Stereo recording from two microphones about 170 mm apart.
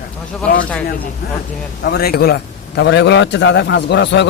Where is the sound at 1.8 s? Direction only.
70° left (ahead or behind).